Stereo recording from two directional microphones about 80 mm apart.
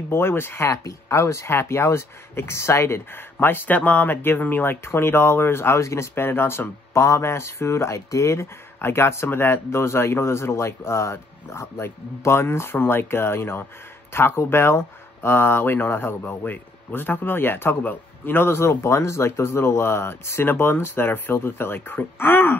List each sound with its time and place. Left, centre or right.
0.1 s a man's voice: left